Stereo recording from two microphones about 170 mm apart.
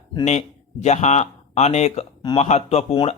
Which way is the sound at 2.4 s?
40° left (ahead or behind).